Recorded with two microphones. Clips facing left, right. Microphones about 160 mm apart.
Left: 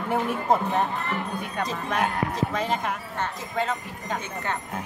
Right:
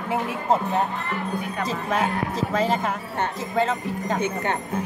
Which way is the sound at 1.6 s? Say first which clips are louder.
Right 1 dB; 5° right (ahead or behind).